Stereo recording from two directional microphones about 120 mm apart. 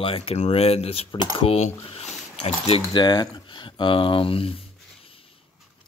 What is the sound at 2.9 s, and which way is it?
Speech, 40° left (ahead or behind).